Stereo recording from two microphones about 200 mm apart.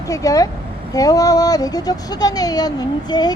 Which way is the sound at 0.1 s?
15° left (ahead or behind).